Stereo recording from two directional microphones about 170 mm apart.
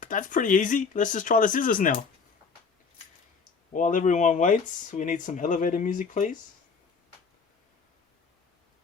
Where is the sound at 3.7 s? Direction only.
50° left (ahead or behind).